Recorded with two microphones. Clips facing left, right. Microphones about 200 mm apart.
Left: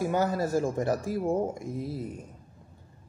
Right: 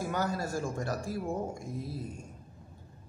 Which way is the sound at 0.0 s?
20° left (ahead or behind).